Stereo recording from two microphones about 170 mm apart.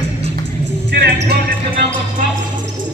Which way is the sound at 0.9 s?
75° right (ahead or behind).